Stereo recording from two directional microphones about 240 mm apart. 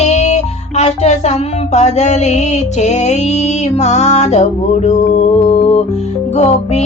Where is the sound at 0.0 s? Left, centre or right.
Left.